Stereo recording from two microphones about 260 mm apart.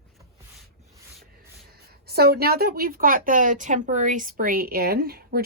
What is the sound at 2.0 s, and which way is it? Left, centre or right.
A woman's voice, right.